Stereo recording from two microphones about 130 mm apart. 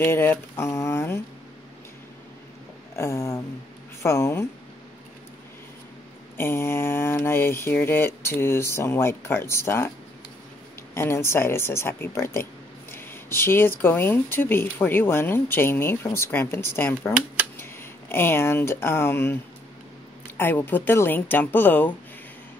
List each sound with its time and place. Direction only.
0.0 s speech: 15° left (ahead or behind)
3.0 s speech: 20° left (ahead or behind)
6.3 s speech: 20° left (ahead or behind)
11.0 s speech: 20° left (ahead or behind)
20.3 s speech: 15° left (ahead or behind)